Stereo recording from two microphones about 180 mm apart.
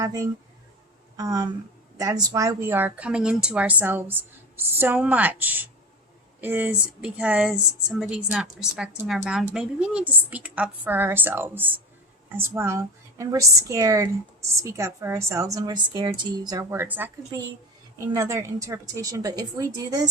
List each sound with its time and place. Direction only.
0.0 s a woman's voice: 20° right (ahead or behind)